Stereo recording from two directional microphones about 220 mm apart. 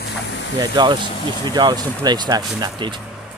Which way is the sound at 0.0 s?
55° left (ahead or behind).